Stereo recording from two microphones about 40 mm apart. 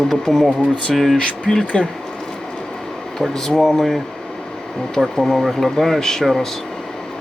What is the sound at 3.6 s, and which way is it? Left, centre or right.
Speech, centre.